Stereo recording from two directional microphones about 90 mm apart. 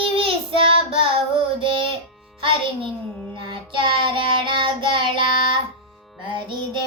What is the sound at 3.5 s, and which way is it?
Child singing, 60° right (ahead or behind).